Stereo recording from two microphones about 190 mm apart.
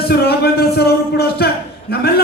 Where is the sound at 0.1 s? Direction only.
60° left (ahead or behind).